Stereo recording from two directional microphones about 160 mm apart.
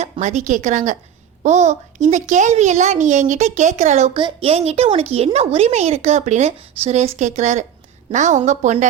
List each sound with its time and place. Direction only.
0.0 s a child's voice: 45° right (ahead or behind)